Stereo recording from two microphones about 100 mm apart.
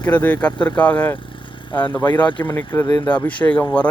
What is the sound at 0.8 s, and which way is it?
Speech, 15° left (ahead or behind).